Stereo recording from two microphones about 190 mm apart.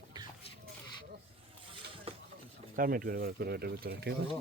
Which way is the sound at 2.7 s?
50° right (ahead or behind).